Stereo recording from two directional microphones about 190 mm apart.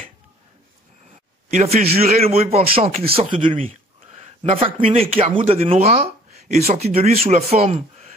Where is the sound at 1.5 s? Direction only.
40° right (ahead or behind).